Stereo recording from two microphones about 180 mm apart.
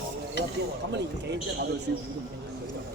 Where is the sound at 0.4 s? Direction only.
70° left (ahead or behind).